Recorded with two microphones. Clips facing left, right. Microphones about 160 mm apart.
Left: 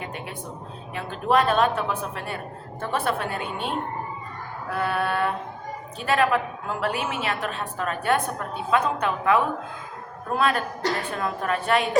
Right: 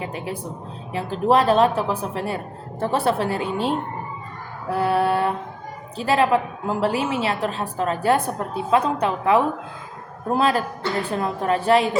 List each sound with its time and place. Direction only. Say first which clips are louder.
0.9 s a woman's voice: right 4 dB; 30° right (ahead or behind)